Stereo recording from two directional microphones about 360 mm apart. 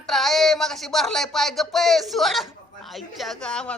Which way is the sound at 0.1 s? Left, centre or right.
Centre.